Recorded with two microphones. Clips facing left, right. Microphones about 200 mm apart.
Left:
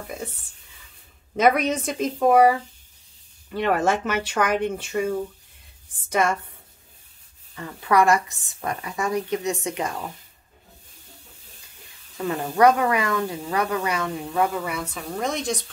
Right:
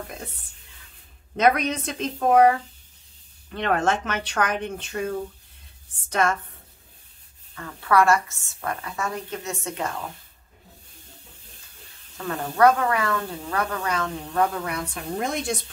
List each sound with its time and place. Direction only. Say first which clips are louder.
1.3 s speech: left 1 dB; 5° left (ahead or behind)
6.0 s speech: left 1 dB; 10° left (ahead or behind)
7.5 s speech: left 1 dB; 15° left (ahead or behind)
12.3 s speech: left 1 dB; 15° left (ahead or behind); by 15.4 s 5° right (ahead or behind)